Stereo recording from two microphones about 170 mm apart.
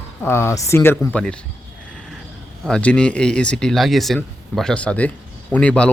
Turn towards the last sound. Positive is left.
turn(degrees=5)  # may be behind; listen again after turning